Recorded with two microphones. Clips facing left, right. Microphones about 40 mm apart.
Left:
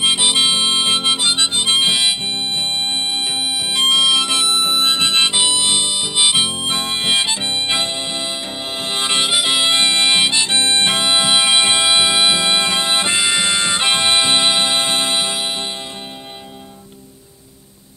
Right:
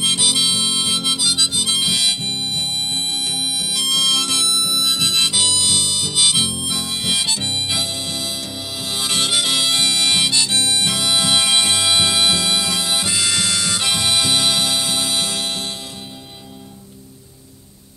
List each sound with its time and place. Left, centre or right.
0.0 s harmonica: left
15.1 s music: left